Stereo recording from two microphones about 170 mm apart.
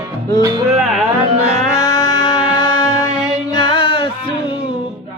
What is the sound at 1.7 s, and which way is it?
Music, 20° left (ahead or behind).